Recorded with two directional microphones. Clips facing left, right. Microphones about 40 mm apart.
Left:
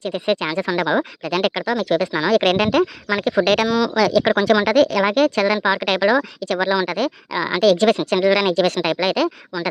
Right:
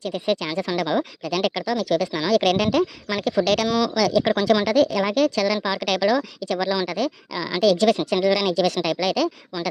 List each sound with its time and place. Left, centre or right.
0.0 s speech: left
1.2 s speech: left
3.7 s speech: centre
4.1 s speech: left